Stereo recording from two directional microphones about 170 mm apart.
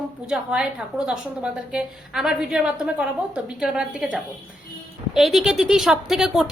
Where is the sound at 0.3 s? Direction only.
5° right (ahead or behind).